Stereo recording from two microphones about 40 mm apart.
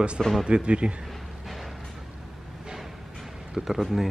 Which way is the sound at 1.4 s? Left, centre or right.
Centre.